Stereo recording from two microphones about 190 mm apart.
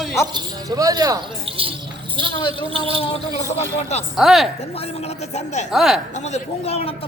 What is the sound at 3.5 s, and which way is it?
Speech, 35° left (ahead or behind).